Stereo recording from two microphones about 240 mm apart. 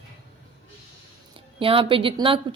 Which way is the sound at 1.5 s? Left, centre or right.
Right.